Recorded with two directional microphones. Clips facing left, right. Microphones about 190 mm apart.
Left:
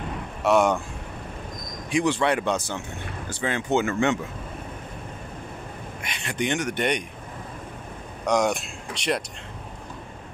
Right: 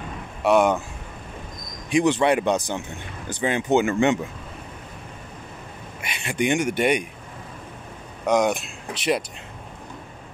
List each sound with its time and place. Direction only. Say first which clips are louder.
0.4 s speech: right 2 dB; centre (ahead or behind)
1.9 s speech: right 4 dB; 20° right (ahead or behind)
6.0 s speech: right 4 dB; 10° right (ahead or behind)
8.3 s speech: right 2 dB; centre (ahead or behind)